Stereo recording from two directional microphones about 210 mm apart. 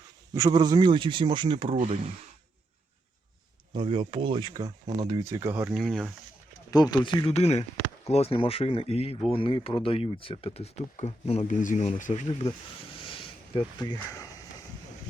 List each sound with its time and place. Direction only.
0.3 s speech: 15° right (ahead or behind)
3.8 s speech: 25° right (ahead or behind); by 6.1 s centre (ahead or behind)
6.7 s speech: 20° left (ahead or behind); by 12.5 s 35° left (ahead or behind)
13.0 s a sound: 25° left (ahead or behind)